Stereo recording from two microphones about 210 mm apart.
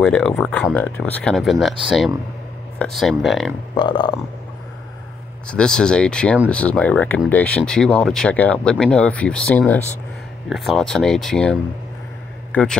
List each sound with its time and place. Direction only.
0.0 s speech: centre (ahead or behind)
3.7 s speech: 20° left (ahead or behind)
5.5 s speech: 5° left (ahead or behind)
12.5 s a man's voice: 5° left (ahead or behind)